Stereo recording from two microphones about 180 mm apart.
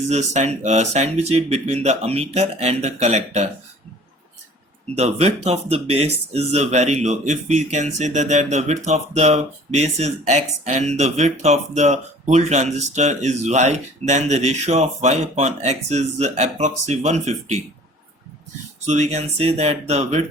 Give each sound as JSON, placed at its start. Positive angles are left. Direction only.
{"t": 0.1, "sound": "speech", "side_deg": -40}
{"t": 4.9, "sound": "speech", "side_deg": -35}
{"t": 18.9, "sound": "speech", "side_deg": -40}